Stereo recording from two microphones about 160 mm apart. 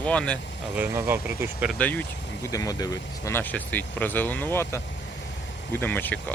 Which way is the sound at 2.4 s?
20° left (ahead or behind).